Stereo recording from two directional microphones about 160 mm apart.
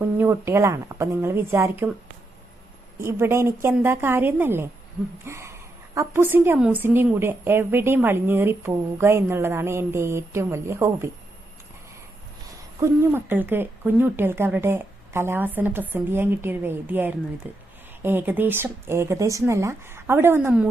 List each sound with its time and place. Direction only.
0.2 s a woman's voice: 15° right (ahead or behind)
3.0 s a woman's voice: 15° right (ahead or behind)
12.8 s a woman's voice: 15° right (ahead or behind)